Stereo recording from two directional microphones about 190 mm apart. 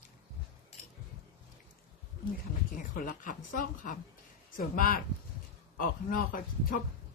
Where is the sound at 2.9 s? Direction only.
45° left (ahead or behind).